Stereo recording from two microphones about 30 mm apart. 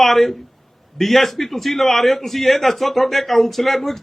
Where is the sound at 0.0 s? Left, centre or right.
Centre.